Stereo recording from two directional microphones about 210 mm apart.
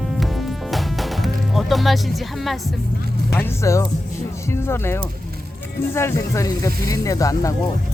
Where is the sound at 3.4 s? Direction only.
15° left (ahead or behind).